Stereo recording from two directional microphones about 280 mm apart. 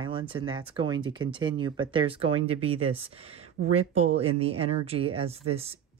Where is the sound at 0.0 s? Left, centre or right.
Centre.